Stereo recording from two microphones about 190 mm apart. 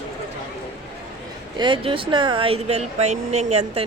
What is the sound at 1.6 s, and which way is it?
Speech, 25° right (ahead or behind).